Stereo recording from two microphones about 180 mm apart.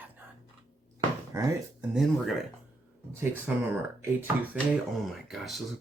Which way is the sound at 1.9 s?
Centre (ahead or behind).